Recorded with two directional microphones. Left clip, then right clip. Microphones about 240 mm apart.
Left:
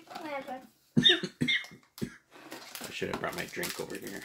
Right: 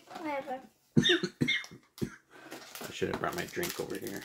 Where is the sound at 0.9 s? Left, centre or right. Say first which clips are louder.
Left 3 dB; right.